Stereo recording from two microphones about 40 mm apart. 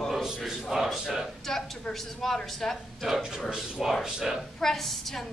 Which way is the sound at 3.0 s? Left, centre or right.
Centre.